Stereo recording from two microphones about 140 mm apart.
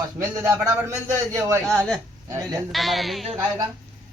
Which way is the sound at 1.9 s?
25° right (ahead or behind).